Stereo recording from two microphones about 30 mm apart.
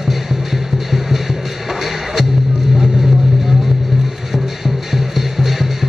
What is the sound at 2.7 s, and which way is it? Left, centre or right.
Vehicle, centre.